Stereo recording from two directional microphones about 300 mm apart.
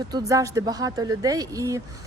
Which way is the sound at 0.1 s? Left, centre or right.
Centre.